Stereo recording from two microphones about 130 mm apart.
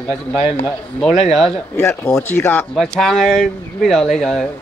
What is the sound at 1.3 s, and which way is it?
Speech, 5° left (ahead or behind).